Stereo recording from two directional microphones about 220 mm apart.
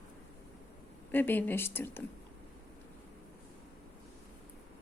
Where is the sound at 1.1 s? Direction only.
10° left (ahead or behind).